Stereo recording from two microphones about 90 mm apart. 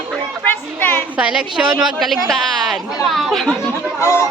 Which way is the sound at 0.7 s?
20° left (ahead or behind).